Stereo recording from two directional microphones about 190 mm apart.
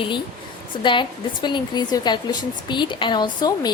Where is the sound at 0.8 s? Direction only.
25° left (ahead or behind).